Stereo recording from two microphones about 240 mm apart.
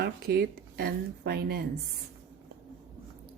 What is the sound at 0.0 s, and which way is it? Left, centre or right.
Speech, right.